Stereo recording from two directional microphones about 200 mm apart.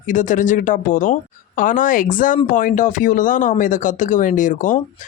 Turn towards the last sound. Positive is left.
turn(degrees=40)  # may be behind; listen again after turning